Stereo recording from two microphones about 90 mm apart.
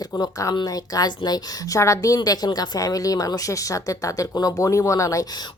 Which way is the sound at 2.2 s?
50° left (ahead or behind).